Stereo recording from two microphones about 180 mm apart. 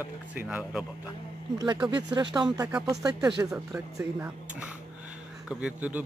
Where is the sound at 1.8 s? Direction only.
25° right (ahead or behind).